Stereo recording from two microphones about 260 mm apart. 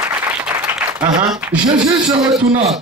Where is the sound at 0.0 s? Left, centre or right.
Centre.